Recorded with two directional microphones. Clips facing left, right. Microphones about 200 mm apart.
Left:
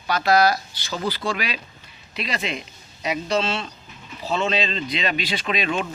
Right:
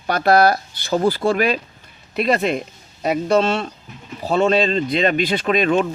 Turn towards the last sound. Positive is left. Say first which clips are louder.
# right 8 dB
turn(degrees=-45)  # may be behind; listen again after turning